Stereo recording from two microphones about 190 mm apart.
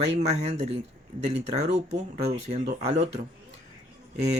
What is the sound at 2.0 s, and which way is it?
Speech, 35° right (ahead or behind).